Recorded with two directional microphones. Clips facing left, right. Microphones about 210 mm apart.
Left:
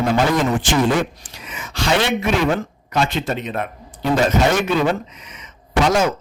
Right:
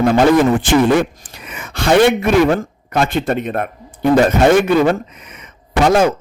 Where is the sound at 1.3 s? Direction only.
55° right (ahead or behind).